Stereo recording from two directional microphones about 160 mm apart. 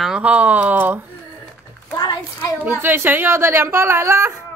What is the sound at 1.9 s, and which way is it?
Speech, 25° left (ahead or behind).